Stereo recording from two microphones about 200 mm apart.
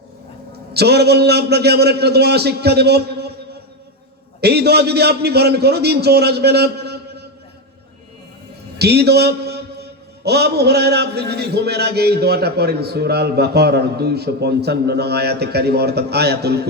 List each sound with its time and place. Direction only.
0.7 s a man's voice: 55° right (ahead or behind)
4.4 s a man's voice: 55° right (ahead or behind)
8.8 s a man's voice: 55° right (ahead or behind)